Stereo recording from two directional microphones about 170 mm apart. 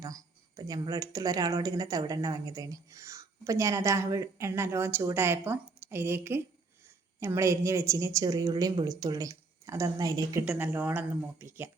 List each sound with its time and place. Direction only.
0.0 s speech: 20° right (ahead or behind)
10.4 s speech: 10° right (ahead or behind)